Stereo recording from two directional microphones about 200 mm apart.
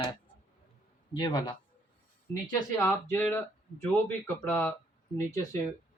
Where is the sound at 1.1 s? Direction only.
20° left (ahead or behind).